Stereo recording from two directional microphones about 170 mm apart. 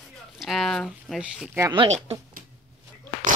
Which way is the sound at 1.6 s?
25° right (ahead or behind).